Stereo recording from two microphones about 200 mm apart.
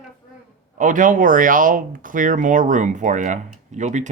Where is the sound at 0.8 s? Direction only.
40° right (ahead or behind).